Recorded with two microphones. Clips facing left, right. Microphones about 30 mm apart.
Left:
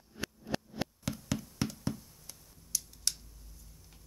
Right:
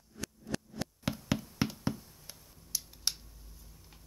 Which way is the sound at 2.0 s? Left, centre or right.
Centre.